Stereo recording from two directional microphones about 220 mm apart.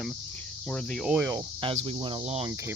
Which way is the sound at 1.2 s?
20° right (ahead or behind).